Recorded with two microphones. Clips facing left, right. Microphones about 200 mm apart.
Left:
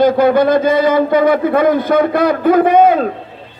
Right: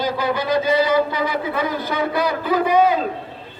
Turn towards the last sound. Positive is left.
turn(degrees=55)  # may be behind; listen again after turning